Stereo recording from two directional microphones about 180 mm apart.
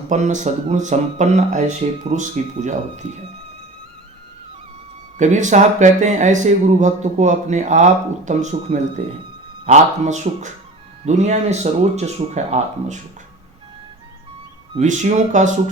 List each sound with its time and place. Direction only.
0.1 s speech: 40° right (ahead or behind)
5.1 s speech: 40° right (ahead or behind)
14.7 s speech: 40° right (ahead or behind)